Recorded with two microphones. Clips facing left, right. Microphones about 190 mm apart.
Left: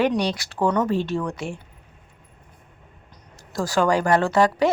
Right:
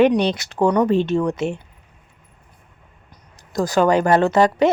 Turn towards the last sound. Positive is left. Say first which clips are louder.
# right 3 dB
turn(degrees=-20)  # may be behind; listen again after turning